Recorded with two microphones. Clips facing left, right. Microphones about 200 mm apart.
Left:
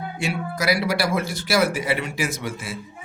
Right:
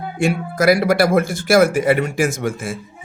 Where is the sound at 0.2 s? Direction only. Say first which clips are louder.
Right 9 dB; 50° right (ahead or behind).